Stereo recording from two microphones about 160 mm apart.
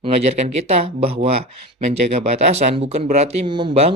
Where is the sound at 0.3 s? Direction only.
40° right (ahead or behind).